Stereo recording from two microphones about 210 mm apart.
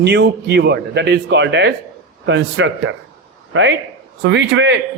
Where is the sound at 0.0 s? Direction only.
55° right (ahead or behind).